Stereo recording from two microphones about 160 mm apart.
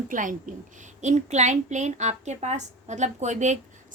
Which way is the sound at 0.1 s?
55° right (ahead or behind).